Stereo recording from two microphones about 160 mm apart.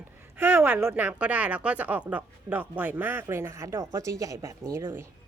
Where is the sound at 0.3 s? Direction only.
15° right (ahead or behind).